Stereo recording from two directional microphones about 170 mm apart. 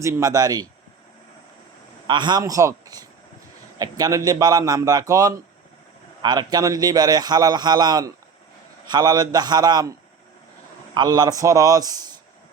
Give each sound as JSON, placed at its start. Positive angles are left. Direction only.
{"t": 0.0, "sound": "a man's voice", "side_deg": -20}
{"t": 2.0, "sound": "a man's voice", "side_deg": -25}
{"t": 10.9, "sound": "a man's voice", "side_deg": -25}